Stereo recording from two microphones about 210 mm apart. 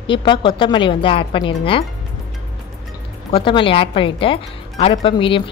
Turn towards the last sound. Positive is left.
turn(degrees=25)  # may be behind; listen again after turning